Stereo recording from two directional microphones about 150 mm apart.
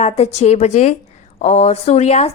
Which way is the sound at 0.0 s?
45° left (ahead or behind).